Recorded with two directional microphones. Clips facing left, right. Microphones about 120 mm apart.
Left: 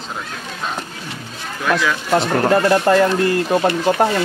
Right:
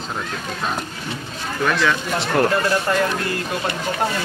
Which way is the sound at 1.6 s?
5° left (ahead or behind).